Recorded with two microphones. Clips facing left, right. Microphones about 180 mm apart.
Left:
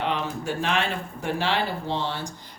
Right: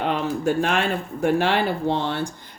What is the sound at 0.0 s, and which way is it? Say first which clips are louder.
Speech: right 5 dB; 50° right (ahead or behind).